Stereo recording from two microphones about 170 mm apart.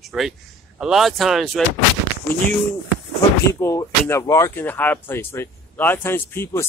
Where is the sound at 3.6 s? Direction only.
15° left (ahead or behind).